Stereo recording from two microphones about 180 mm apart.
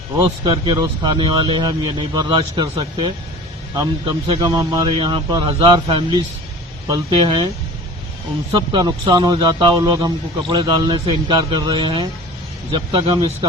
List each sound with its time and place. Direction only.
0.4 s a man's voice: 25° right (ahead or behind)
8.5 s a man's voice: 25° right (ahead or behind)